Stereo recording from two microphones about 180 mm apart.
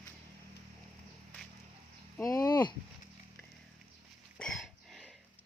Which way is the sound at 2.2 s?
20° left (ahead or behind).